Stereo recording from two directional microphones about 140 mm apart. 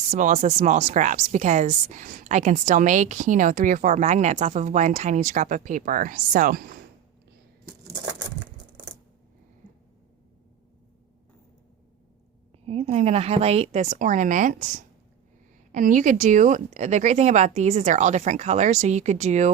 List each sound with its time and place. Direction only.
0.1 s a woman's voice: 60° right (ahead or behind); by 6.7 s 85° right
9.6 s a sound: 65° right (ahead or behind)
12.6 s a woman's voice: 45° right (ahead or behind)